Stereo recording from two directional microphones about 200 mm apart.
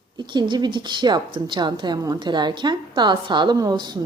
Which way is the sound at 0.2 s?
20° right (ahead or behind).